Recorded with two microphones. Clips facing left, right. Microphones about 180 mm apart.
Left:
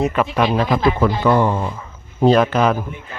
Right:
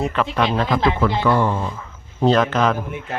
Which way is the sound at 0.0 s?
10° left (ahead or behind).